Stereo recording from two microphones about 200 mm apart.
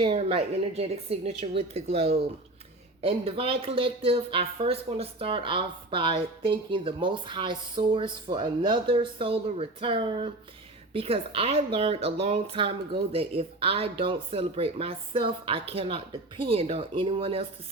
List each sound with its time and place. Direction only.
0.0 s a woman's voice: 30° right (ahead or behind)